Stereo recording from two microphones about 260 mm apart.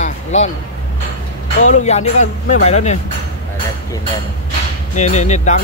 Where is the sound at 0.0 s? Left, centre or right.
Left.